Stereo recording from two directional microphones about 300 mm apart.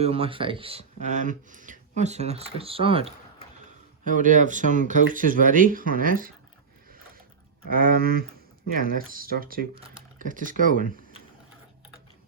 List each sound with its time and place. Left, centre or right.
0.0 s speech: centre
7.7 s speech: right